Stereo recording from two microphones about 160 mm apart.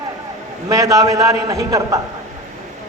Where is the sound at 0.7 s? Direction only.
20° right (ahead or behind).